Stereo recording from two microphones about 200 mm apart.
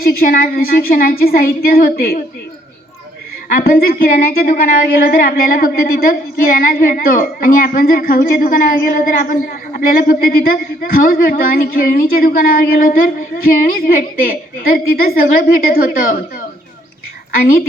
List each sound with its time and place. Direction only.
0.0 s a woman's voice: 45° left (ahead or behind)
3.5 s a woman's voice: 45° left (ahead or behind)